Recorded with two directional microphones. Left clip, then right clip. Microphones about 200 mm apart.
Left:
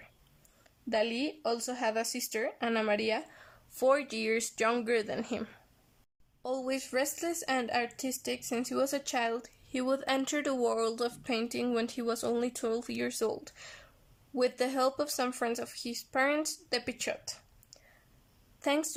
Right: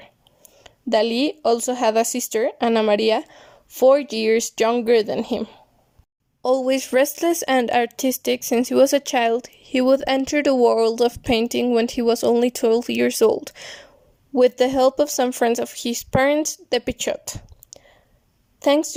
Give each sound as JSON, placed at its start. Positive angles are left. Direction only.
{"t": 0.6, "sound": "speech", "side_deg": -35}
{"t": 6.4, "sound": "a woman's voice", "side_deg": -35}